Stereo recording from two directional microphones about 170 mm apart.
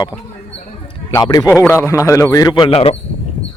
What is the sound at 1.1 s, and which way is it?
A man's voice, 25° left (ahead or behind).